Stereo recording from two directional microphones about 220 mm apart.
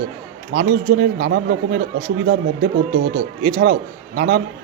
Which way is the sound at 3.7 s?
40° right (ahead or behind).